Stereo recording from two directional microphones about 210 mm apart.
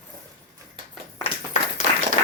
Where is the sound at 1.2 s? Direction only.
30° left (ahead or behind).